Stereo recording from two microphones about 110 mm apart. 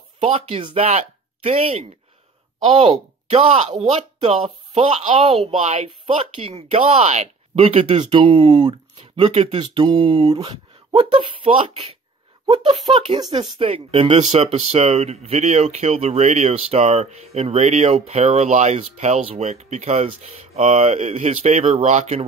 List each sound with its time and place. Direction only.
0.5 s speech: 60° right (ahead or behind); by 5.1 s 85° right
5.1 s speech: 55° right (ahead or behind); by 7.2 s 80° right
7.5 s speech: 60° right (ahead or behind)
8.1 s speech: 50° right (ahead or behind)
9.0 s speech: 60° right (ahead or behind); by 22.2 s 90° right